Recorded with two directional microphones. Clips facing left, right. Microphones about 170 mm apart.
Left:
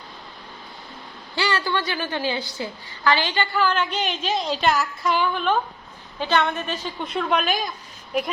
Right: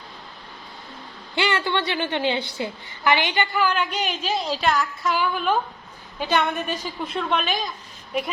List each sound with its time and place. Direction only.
1.4 s a woman's voice: 25° right (ahead or behind)
7.1 s a woman's voice: centre (ahead or behind)